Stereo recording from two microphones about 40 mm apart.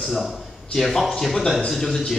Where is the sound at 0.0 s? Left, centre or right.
Centre.